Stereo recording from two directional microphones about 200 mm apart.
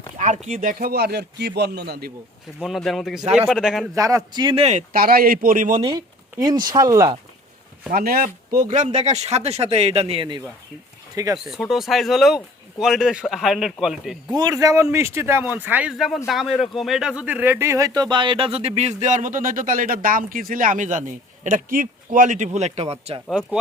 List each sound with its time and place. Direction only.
0.2 s speech: 35° right (ahead or behind)
2.6 s speech: centre (ahead or behind)
3.9 s speech: 15° right (ahead or behind)
4.9 s speech: 50° right (ahead or behind)
6.3 s speech: 20° right (ahead or behind)
7.9 s speech: 50° right (ahead or behind); by 11.3 s 15° right (ahead or behind)
11.4 s speech: centre (ahead or behind)
14.3 s speech: 20° right (ahead or behind)